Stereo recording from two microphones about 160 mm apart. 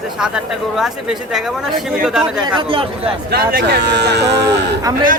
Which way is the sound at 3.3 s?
75° right (ahead or behind).